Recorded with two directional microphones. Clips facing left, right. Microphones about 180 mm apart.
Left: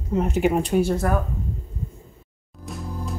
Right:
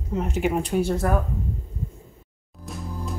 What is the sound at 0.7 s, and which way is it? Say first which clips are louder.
Speech: left 2 dB; 15° left (ahead or behind).